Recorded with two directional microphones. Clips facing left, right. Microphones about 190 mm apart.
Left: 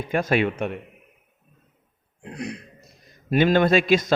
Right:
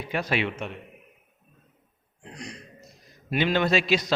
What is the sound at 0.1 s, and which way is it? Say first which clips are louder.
Speech: left 6 dB; 50° left (ahead or behind).